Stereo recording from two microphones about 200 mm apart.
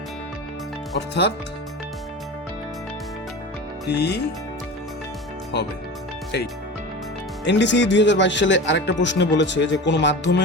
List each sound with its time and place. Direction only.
0.9 s speech: 55° left (ahead or behind)
3.8 s speech: 55° left (ahead or behind)
7.4 s speech: 60° left (ahead or behind)